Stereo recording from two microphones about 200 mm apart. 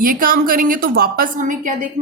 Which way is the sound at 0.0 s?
45° right (ahead or behind).